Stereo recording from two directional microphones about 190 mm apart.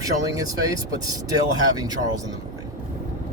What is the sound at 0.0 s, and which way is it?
Speech, 20° right (ahead or behind).